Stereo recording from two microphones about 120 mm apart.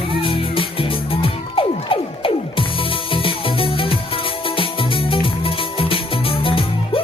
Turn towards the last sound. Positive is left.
turn(degrees=50)  # may be behind; listen again after turning